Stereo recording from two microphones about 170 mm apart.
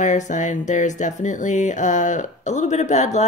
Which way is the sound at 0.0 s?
45° left (ahead or behind).